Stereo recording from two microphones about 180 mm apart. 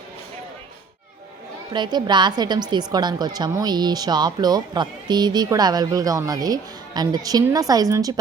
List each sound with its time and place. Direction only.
1.7 s speech: 25° right (ahead or behind)